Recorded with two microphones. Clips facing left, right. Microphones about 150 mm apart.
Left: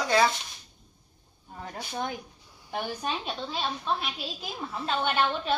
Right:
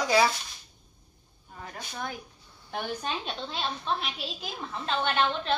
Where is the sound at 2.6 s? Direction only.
10° left (ahead or behind).